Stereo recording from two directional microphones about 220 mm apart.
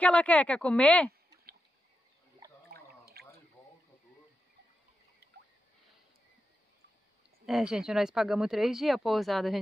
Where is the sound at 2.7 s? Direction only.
45° right (ahead or behind).